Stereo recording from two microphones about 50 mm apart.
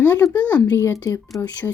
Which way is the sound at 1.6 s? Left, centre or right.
Left.